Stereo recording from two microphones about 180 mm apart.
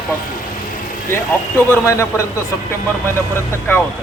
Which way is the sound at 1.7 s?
15° left (ahead or behind).